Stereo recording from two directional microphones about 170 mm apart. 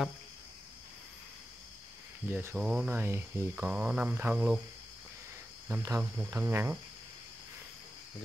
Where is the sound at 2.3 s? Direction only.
10° right (ahead or behind).